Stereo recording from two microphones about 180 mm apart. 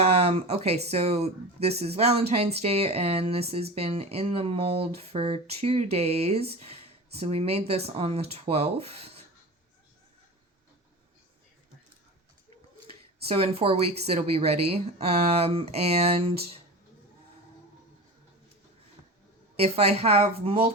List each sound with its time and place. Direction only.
0.0 s speech: 35° right (ahead or behind)
13.2 s speech: 35° right (ahead or behind)
19.6 s speech: 35° right (ahead or behind)